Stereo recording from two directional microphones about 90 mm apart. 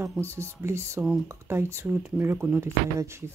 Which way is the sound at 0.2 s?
30° right (ahead or behind).